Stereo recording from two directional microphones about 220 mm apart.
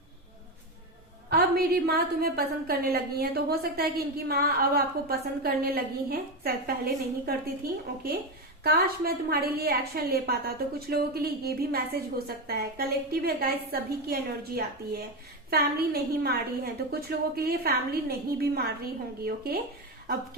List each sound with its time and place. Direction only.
1.3 s a woman's voice: 45° right (ahead or behind)